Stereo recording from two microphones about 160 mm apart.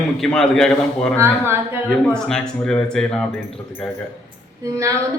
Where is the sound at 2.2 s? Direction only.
5° left (ahead or behind).